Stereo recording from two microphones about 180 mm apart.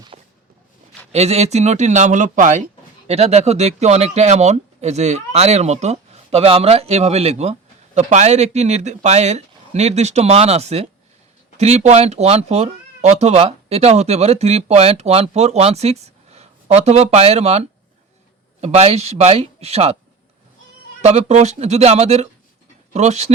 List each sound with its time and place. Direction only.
0.1 s a sound: 30° right (ahead or behind)
1.1 s speech: 35° right (ahead or behind)
21.0 s speech: 35° right (ahead or behind)